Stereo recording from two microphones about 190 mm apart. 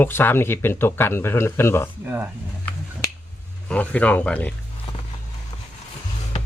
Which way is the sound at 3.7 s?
5° left (ahead or behind).